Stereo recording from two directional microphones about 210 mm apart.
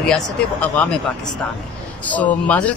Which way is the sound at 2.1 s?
5° left (ahead or behind).